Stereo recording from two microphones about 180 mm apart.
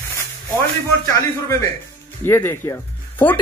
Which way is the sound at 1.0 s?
15° left (ahead or behind).